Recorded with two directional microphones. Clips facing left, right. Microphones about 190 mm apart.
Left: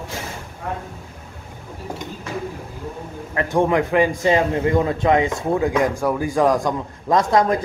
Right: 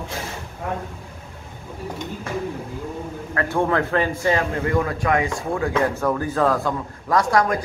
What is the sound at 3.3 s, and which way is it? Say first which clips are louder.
A man's voice: left 3 dB; 15° left (ahead or behind).